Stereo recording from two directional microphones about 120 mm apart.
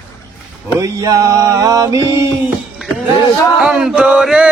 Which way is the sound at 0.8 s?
30° right (ahead or behind).